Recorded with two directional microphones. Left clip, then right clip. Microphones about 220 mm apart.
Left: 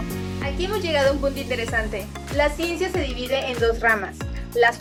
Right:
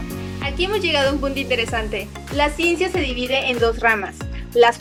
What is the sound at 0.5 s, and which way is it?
Speech, 5° right (ahead or behind).